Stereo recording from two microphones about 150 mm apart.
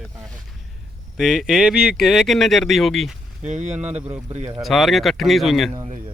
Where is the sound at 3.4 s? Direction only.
50° right (ahead or behind).